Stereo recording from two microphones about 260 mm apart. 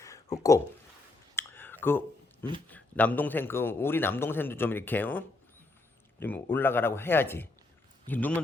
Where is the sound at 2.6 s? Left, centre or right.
Centre.